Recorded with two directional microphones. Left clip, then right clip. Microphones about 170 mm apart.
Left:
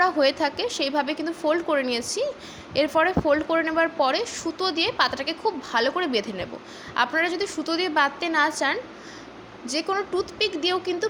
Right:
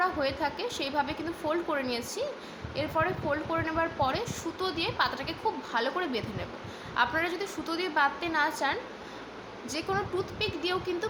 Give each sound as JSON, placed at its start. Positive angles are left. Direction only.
{"t": 0.0, "sound": "a woman's voice", "side_deg": 40}
{"t": 2.7, "sound": "a woman's voice", "side_deg": 45}